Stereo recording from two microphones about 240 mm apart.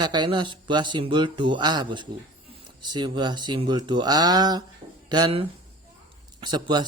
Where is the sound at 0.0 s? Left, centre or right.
Centre.